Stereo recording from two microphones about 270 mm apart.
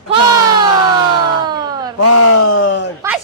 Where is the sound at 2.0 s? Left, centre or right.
Left.